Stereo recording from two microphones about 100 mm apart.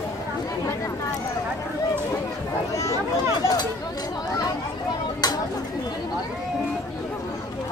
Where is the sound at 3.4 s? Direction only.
40° left (ahead or behind).